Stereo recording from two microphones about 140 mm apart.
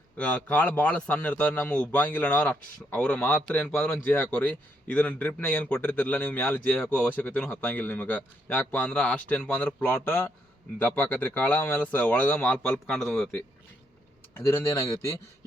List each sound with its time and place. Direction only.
0.2 s a man's voice: 10° left (ahead or behind)
14.3 s speech: 20° left (ahead or behind)